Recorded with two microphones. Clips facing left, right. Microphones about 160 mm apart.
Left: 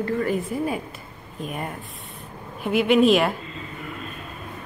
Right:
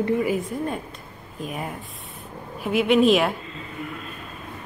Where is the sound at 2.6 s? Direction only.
Centre (ahead or behind).